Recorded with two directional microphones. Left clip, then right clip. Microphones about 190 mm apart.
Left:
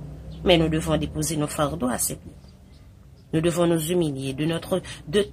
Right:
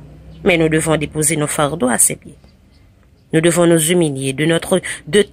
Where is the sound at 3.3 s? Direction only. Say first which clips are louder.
Right 9 dB; 30° right (ahead or behind).